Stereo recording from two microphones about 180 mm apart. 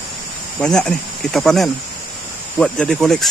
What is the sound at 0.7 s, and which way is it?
Speech, 5° left (ahead or behind).